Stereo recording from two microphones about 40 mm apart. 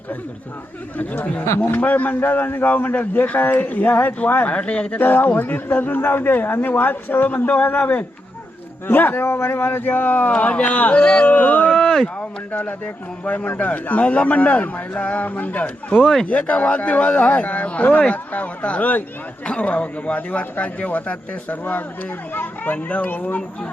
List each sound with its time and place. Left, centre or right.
0.9 s a man's voice: left
2.6 s speech: left
4.4 s speech: left
4.9 s a man's voice: left
10.3 s a man's voice: left
11.3 s a man's voice: left